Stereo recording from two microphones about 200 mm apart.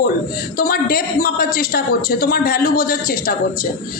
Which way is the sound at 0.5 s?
45° left (ahead or behind).